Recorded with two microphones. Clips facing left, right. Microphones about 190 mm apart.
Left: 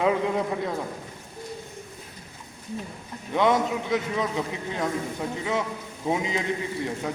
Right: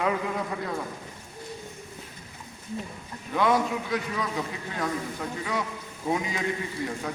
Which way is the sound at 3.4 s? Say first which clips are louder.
Left 2 dB; 20° left (ahead or behind).